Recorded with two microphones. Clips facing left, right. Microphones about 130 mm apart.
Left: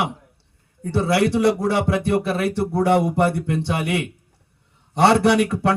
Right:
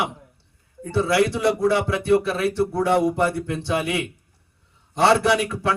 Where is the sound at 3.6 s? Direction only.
65° left (ahead or behind).